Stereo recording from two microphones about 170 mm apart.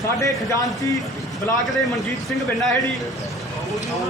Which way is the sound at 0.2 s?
20° left (ahead or behind).